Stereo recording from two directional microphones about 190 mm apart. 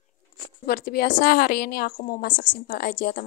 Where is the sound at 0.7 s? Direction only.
55° left (ahead or behind).